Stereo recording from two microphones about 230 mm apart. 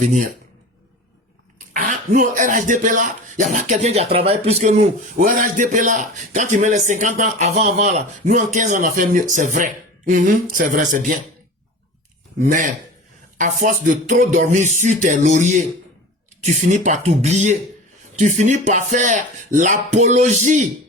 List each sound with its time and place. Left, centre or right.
0.0 s speech: right
1.5 s speech: right
12.4 s speech: right